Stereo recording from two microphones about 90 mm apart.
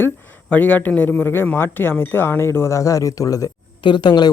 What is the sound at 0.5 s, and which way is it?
Speech, 20° left (ahead or behind).